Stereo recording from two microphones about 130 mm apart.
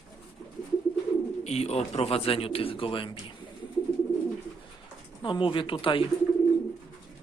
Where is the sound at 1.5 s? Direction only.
55° left (ahead or behind).